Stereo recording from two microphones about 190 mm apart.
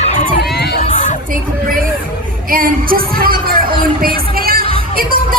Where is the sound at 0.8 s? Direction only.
35° left (ahead or behind).